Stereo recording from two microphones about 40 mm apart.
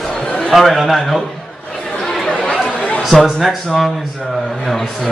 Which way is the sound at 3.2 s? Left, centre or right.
Centre.